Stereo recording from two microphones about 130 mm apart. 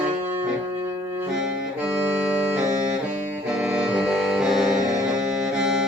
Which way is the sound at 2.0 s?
10° right (ahead or behind).